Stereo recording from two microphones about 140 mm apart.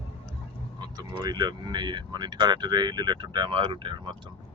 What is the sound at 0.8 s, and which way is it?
Speech, 30° right (ahead or behind).